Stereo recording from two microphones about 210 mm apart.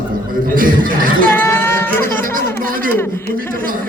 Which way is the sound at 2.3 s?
40° right (ahead or behind).